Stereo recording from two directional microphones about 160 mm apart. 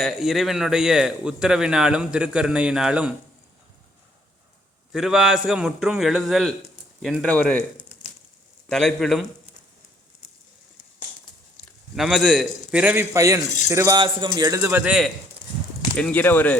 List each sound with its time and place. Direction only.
0.0 s a man's voice: centre (ahead or behind)
4.9 s a man's voice: 5° right (ahead or behind)
8.7 s a man's voice: 5° left (ahead or behind)
11.9 s a man's voice: centre (ahead or behind)
16.0 s speech: 10° left (ahead or behind)